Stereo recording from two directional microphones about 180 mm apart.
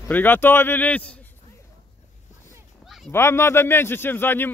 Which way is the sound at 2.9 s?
Centre (ahead or behind).